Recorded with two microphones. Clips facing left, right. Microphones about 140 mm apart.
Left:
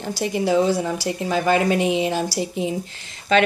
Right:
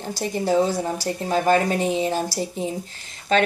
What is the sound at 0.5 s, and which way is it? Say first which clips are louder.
Speech: left 1 dB; 45° right (ahead or behind).